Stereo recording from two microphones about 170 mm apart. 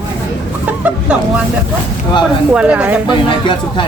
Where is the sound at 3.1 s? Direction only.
25° left (ahead or behind).